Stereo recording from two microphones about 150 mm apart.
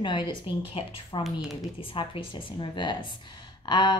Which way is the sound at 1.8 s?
35° left (ahead or behind).